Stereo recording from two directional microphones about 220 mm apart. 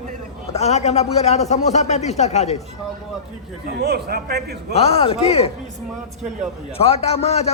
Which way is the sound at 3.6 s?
45° right (ahead or behind).